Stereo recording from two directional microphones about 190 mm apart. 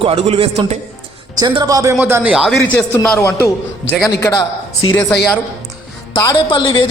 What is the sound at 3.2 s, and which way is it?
A man's voice, 15° left (ahead or behind).